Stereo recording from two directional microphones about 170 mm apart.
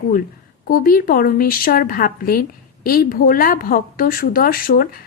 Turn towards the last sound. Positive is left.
turn(degrees=60)  # may be behind; listen again after turning